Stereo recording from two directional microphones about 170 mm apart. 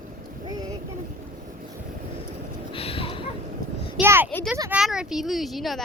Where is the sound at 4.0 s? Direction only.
15° right (ahead or behind).